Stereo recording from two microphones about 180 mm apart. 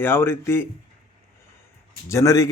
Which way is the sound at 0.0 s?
15° left (ahead or behind).